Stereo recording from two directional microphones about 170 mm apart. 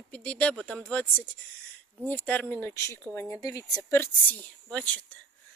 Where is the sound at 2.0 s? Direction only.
10° left (ahead or behind).